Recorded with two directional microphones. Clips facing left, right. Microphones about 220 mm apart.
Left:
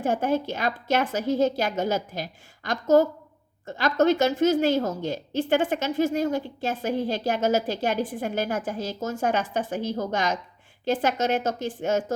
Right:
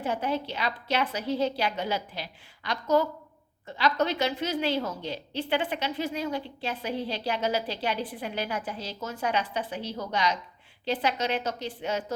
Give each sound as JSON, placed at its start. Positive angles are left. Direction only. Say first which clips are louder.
{"t": 0.0, "sound": "a woman's voice", "louder": "left 5 dB", "side_deg": 45}